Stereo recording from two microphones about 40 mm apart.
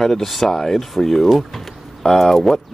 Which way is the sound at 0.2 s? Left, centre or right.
Centre.